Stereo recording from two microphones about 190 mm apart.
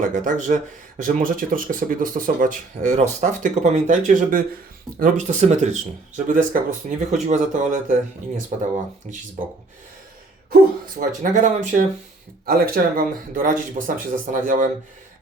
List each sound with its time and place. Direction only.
0.3 s speech: 40° right (ahead or behind)
11.0 s speech: 40° right (ahead or behind)
12.5 s speech: 50° right (ahead or behind)